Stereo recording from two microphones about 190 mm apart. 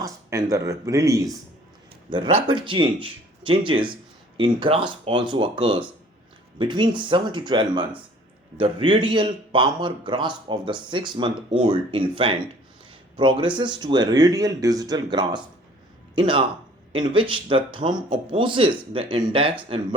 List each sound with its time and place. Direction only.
0.0 s a man's voice: 15° right (ahead or behind)